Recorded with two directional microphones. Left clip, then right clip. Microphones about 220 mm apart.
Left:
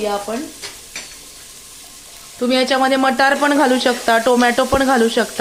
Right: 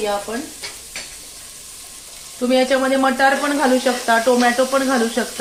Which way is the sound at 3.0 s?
50° left (ahead or behind).